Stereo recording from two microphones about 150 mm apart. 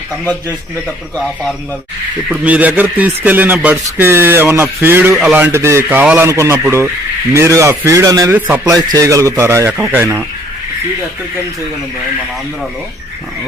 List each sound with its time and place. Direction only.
1.1 s speech: centre (ahead or behind)
2.3 s a man's voice: 10° right (ahead or behind)
8.4 s speech: 10° right (ahead or behind)
8.6 s a man's voice: 25° right (ahead or behind)